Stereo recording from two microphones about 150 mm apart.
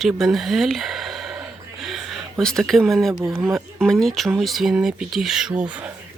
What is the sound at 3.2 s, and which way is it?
Speech, 15° right (ahead or behind).